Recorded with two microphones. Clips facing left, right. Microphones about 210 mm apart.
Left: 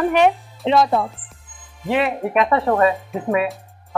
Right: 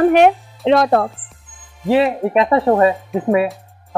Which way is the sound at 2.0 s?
20° right (ahead or behind).